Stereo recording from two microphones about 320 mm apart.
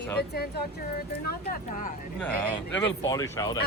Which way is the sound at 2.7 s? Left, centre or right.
Centre.